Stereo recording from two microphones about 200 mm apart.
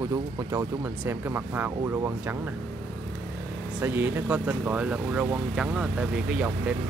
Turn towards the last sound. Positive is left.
turn(degrees=-5)  # may be behind; listen again after turning